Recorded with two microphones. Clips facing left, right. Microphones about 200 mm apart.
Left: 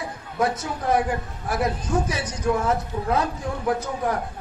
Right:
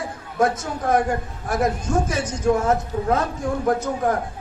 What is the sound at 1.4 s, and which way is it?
A man's voice, 45° right (ahead or behind).